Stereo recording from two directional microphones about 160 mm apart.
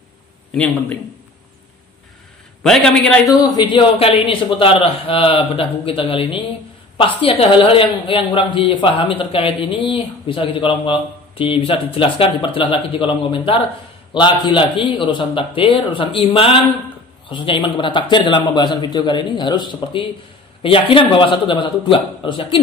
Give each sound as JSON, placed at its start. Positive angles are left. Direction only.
{"t": 0.6, "sound": "a man's voice", "side_deg": 5}
{"t": 2.6, "sound": "a man's voice", "side_deg": 5}
{"t": 3.3, "sound": "a woman's voice", "side_deg": 25}